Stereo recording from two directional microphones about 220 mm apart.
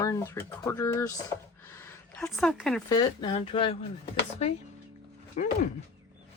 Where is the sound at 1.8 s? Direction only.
10° left (ahead or behind).